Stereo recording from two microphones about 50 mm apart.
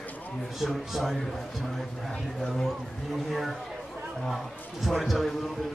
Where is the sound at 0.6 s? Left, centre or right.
Centre.